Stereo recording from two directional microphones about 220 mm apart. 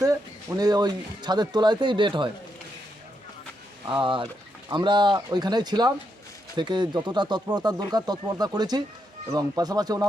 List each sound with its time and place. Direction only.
0.0 s speech: 15° right (ahead or behind)
3.8 s speech: 20° right (ahead or behind)